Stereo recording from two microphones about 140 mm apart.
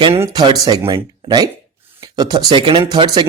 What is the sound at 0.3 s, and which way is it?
Speech, 30° right (ahead or behind).